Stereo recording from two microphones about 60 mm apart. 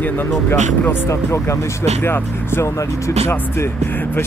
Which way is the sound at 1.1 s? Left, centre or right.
Left.